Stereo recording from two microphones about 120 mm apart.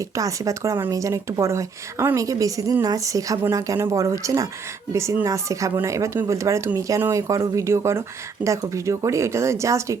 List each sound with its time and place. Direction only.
0.2 s speech: 25° right (ahead or behind)